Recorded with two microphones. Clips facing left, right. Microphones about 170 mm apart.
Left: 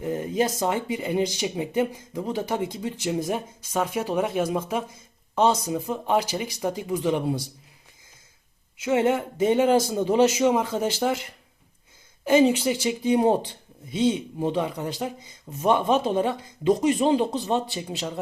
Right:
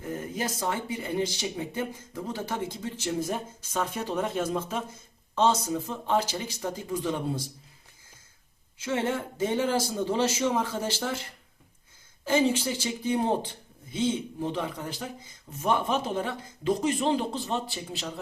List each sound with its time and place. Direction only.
0.0 s speech: 20° left (ahead or behind)
8.8 s speech: 15° left (ahead or behind)